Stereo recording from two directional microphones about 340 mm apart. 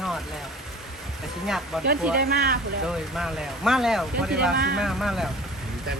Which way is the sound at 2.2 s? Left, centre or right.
Right.